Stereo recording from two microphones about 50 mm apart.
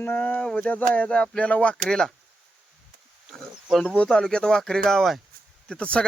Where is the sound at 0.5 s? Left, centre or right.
Left.